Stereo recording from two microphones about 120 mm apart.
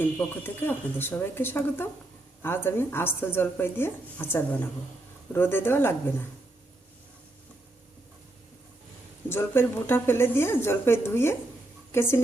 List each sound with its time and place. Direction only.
0.0 s a woman's voice: 15° left (ahead or behind)
9.3 s a woman's voice: 20° left (ahead or behind)